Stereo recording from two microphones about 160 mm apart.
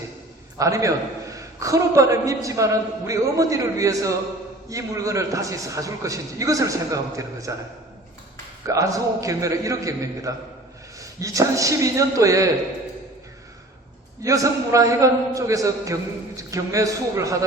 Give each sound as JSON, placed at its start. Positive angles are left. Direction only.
{"t": 0.6, "sound": "a man's voice", "side_deg": -20}
{"t": 8.6, "sound": "a man's voice", "side_deg": -20}
{"t": 14.2, "sound": "a man's voice", "side_deg": -20}